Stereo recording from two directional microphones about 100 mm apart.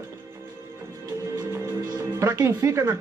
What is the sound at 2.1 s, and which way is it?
Speech, 30° right (ahead or behind).